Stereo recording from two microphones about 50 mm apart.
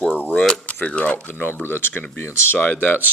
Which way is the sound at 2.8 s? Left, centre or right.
Left.